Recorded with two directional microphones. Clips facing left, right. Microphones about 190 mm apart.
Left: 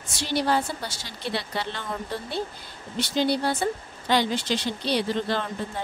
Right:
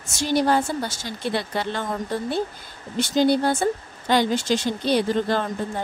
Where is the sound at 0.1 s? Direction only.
45° right (ahead or behind).